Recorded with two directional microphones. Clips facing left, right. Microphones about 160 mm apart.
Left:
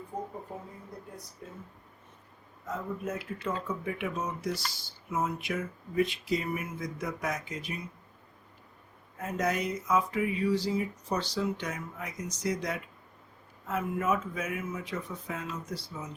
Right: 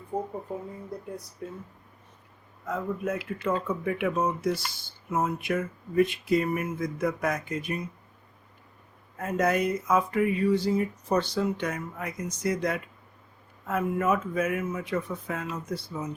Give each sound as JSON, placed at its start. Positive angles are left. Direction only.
{"t": 1.4, "sound": "speech", "side_deg": -65}
{"t": 2.6, "sound": "speech", "side_deg": -60}
{"t": 9.1, "sound": "speech", "side_deg": -55}